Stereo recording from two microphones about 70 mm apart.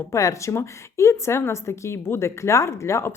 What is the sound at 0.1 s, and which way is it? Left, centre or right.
A woman's voice, left.